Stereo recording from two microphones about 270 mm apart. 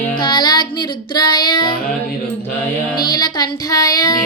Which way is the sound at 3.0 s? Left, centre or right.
Centre.